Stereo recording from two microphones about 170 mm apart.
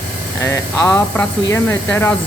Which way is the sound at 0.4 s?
15° left (ahead or behind).